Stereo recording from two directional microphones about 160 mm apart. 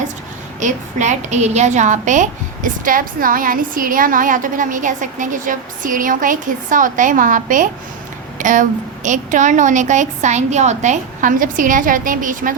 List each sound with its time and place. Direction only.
0.6 s a woman's voice: 50° right (ahead or behind)